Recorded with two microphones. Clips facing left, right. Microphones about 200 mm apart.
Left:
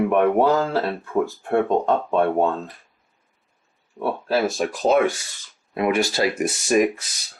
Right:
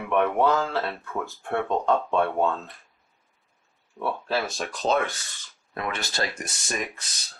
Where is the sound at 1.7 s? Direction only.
20° left (ahead or behind).